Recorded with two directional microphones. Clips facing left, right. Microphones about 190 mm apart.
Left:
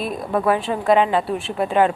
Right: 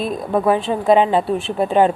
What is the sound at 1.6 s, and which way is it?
Speech, 30° right (ahead or behind).